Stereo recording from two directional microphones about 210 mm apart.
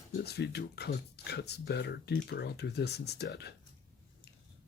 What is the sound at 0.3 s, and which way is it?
Speech, 50° left (ahead or behind).